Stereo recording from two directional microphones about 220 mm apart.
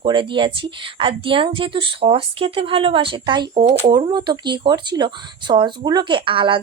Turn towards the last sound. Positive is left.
turn(degrees=-25)  # may be behind; listen again after turning